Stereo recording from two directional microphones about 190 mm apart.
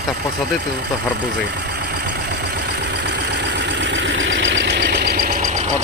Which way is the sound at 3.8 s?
80° right.